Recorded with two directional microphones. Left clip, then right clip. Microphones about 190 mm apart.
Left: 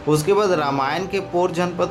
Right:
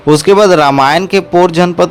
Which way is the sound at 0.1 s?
45° right (ahead or behind).